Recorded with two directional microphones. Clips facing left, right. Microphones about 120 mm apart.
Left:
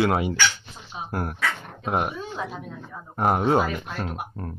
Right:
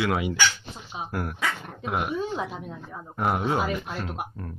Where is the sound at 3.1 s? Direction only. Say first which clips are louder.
Left 5 dB; 40° left (ahead or behind).